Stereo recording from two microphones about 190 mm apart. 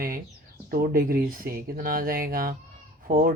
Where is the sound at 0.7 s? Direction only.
50° right (ahead or behind).